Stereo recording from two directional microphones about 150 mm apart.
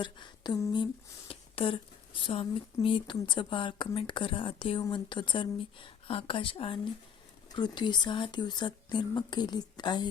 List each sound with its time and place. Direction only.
0.0 s speech: 30° left (ahead or behind)
1.3 s a sound: 35° left (ahead or behind)
2.2 s speech: 35° left (ahead or behind)